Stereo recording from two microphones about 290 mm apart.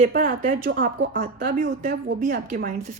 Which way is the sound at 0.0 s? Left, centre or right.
Right.